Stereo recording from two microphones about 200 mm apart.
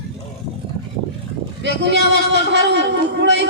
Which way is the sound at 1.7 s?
60° right (ahead or behind).